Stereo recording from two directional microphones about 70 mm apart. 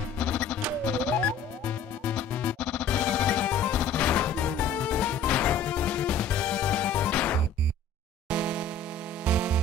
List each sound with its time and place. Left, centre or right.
0.2 s music: centre
8.3 s music: centre